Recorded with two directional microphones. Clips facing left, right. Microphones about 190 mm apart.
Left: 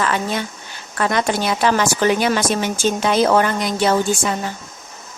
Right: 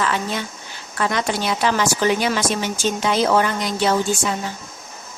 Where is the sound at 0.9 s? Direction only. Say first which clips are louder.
Left 3 dB; 50° left (ahead or behind).